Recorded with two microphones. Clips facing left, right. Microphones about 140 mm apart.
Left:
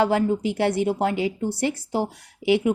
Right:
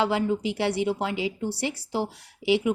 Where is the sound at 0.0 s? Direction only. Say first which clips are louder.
Left 4 dB; 50° left (ahead or behind).